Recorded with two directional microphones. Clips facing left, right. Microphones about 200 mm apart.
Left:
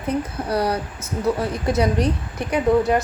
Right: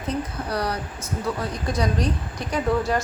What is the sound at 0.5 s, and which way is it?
A woman's voice, 25° left (ahead or behind).